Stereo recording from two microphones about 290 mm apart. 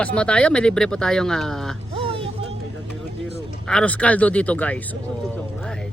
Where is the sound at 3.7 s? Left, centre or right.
Centre.